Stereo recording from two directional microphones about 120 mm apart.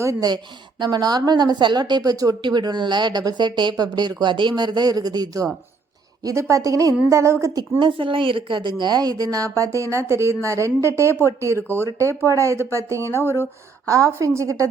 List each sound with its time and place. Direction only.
0.0 s a woman's voice: 30° right (ahead or behind)
7.8 s a woman's voice: 45° right (ahead or behind); by 11.1 s 25° right (ahead or behind)
11.1 s speech: 20° left (ahead or behind)
12.3 s a woman's voice: 25° right (ahead or behind)
13.1 s speech: 20° left (ahead or behind)
13.8 s a woman's voice: 25° right (ahead or behind)